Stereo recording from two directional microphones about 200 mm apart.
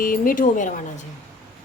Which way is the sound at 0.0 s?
45° left (ahead or behind).